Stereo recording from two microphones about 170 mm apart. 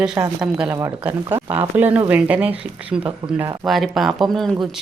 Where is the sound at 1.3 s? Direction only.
30° right (ahead or behind).